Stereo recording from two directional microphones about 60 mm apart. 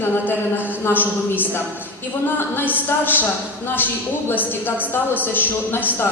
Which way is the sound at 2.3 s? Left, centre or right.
Left.